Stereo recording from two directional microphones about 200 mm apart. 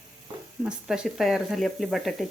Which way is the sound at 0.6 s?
5° right (ahead or behind).